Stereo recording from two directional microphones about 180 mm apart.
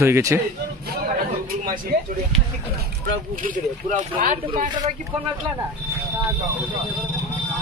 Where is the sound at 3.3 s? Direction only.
50° right (ahead or behind).